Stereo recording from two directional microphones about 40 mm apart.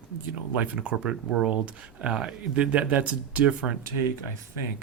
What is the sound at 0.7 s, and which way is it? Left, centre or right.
Speech, right.